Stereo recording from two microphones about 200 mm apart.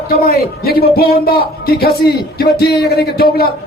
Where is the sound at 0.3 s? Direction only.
50° left (ahead or behind).